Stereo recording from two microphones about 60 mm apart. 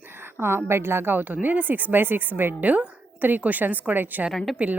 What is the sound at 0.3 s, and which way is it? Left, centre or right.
A woman's voice, right.